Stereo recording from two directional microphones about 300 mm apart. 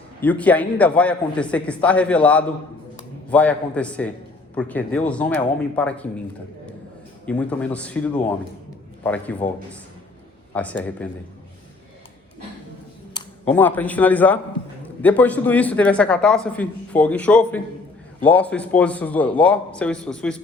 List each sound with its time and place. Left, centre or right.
0.2 s speech: centre
7.3 s speech: centre
10.5 s speech: centre
13.4 s speech: centre